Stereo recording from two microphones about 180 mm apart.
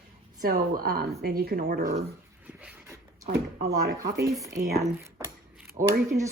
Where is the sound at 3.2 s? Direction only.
65° right (ahead or behind).